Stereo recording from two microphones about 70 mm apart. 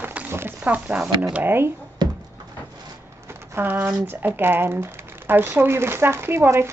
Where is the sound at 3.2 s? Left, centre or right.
Right.